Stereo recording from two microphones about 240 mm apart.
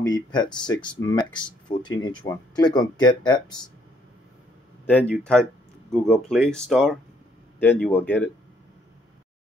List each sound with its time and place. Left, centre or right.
0.0 s speech: centre
4.8 s speech: centre